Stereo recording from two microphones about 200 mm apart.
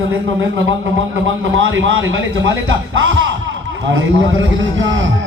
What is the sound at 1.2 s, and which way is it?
A man's voice, 75° right (ahead or behind).